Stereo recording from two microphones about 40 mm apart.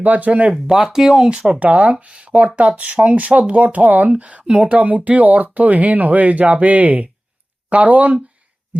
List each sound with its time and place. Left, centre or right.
0.0 s speech: right
0.7 s speech: centre
1.5 s speech: right